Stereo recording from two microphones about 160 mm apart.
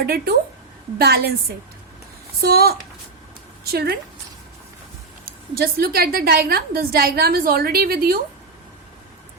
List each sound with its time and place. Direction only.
0.0 s a woman's voice: 75° right (ahead or behind)
2.4 s a woman's voice: 75° right (ahead or behind)
5.5 s a woman's voice: 70° right (ahead or behind)